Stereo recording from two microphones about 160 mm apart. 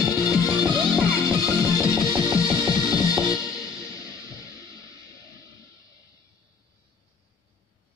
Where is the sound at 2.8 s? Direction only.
25° left (ahead or behind).